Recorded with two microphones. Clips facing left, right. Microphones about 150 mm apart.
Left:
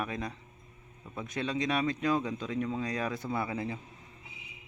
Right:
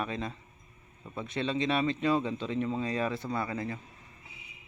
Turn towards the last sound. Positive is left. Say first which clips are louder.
# even
turn(degrees=10)  # may be behind; listen again after turning